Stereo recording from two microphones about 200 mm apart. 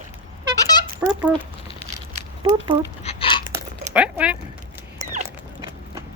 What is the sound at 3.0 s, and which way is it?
Hiccup, 25° left (ahead or behind).